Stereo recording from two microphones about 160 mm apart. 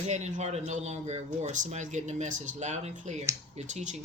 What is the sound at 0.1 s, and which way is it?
Speech, 45° right (ahead or behind).